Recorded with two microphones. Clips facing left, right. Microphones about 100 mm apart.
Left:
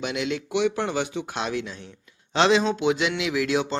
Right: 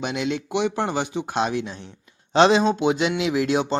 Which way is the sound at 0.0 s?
30° right (ahead or behind).